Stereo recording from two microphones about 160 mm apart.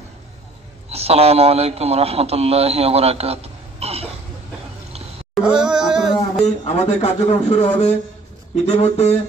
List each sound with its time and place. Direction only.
0.9 s a man's voice: 40° right (ahead or behind)
5.3 s music: 5° right (ahead or behind)
6.6 s speech: 40° left (ahead or behind)